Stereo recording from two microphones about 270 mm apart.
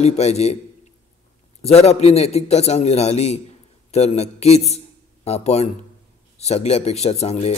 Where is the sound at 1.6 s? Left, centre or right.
Left.